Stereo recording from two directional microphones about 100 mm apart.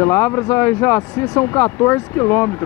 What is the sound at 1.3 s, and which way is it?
Speech, 30° left (ahead or behind).